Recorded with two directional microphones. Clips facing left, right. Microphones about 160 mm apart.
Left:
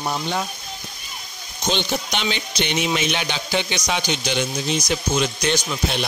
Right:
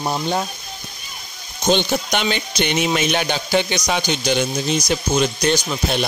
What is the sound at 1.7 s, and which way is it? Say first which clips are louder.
Speech: right 5 dB; 50° right (ahead or behind).